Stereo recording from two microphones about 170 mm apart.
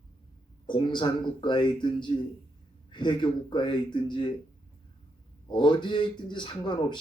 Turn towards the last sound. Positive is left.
turn(degrees=30)  # may be behind; listen again after turning